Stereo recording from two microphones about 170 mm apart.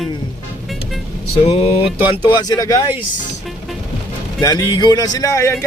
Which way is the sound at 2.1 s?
25° left (ahead or behind).